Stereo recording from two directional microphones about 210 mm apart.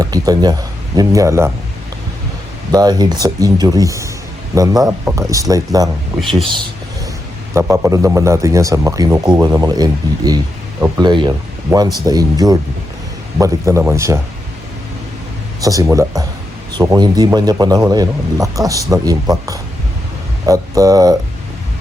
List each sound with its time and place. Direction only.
0.0 s a man's voice: 15° right (ahead or behind)
2.7 s a man's voice: 20° right (ahead or behind)
7.5 s a man's voice: 15° right (ahead or behind)
15.6 s a man's voice: 15° right (ahead or behind)